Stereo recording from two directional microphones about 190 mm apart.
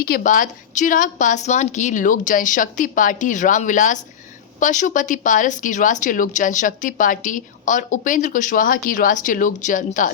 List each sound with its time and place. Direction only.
0.0 s speech: 50° left (ahead or behind)